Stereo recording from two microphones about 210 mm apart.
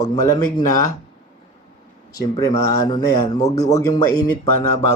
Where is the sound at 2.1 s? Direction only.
20° left (ahead or behind).